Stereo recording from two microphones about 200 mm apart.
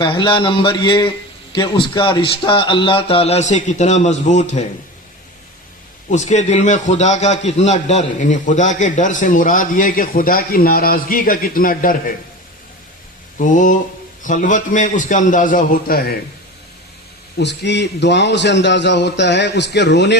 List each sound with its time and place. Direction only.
0.0 s a man's voice: 25° left (ahead or behind)
6.1 s a man's voice: 35° left (ahead or behind)
13.4 s a man's voice: 40° left (ahead or behind)
17.3 s a man's voice: 60° left (ahead or behind)